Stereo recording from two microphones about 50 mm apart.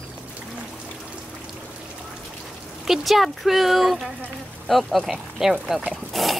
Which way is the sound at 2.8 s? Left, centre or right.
Centre.